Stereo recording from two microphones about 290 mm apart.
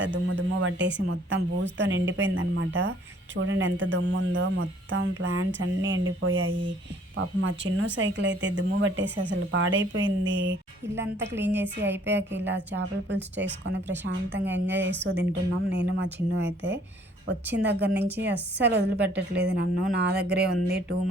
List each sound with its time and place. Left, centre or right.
0.0 s speech: right
7.9 s speech: right
11.3 s a woman's voice: centre
11.8 s speech: right